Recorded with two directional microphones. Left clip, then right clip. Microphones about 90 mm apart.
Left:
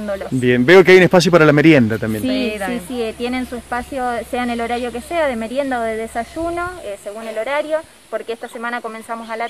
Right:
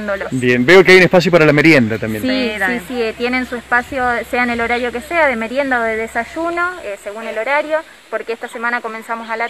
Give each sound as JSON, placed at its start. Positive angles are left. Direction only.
{"t": 0.3, "sound": "speech", "side_deg": 40}
{"t": 0.7, "sound": "speech", "side_deg": 10}